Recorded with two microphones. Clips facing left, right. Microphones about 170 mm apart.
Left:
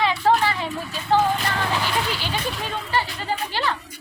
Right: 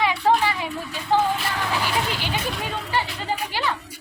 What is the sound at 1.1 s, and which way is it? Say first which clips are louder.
Speech: left 1 dB; 15° right (ahead or behind).